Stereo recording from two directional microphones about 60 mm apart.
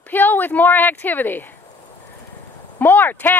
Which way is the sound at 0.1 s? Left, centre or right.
Left.